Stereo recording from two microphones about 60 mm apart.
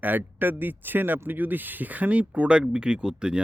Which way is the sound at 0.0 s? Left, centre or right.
Right.